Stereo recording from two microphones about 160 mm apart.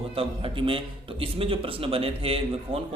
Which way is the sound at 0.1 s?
35° right (ahead or behind).